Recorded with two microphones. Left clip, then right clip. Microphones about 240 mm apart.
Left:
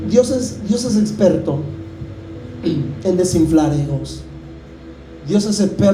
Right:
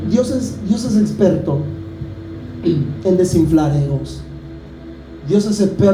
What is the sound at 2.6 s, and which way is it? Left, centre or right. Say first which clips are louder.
A man's voice: right 2 dB; left.